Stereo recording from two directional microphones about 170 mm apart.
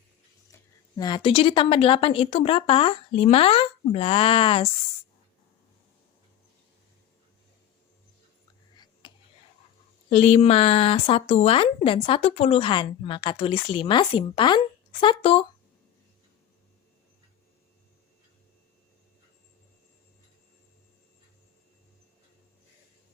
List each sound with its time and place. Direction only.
0.5 s speech: 25° left (ahead or behind)
8.7 s a sound: 25° left (ahead or behind)
10.1 s speech: 40° left (ahead or behind)